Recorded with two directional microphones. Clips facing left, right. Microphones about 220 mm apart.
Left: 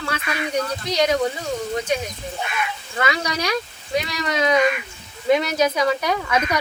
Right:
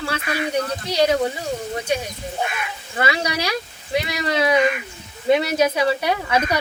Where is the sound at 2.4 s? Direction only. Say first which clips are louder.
Even; 45° right (ahead or behind).